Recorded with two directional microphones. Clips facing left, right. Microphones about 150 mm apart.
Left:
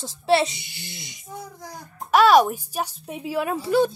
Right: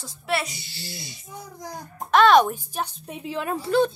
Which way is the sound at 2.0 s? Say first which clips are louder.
Left 1 dB; 10° left (ahead or behind).